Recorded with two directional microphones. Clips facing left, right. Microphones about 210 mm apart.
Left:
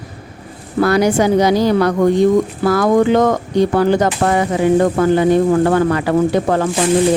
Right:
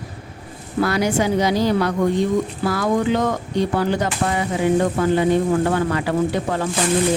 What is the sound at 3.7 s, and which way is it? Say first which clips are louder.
Speech: left 7 dB; 65° left (ahead or behind).